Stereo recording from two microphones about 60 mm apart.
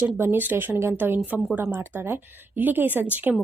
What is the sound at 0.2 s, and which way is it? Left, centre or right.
Speech, right.